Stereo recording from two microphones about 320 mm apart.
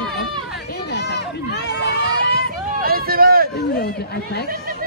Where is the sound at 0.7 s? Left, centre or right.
Left.